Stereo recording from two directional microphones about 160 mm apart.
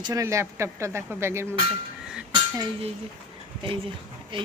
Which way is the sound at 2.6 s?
30° right (ahead or behind).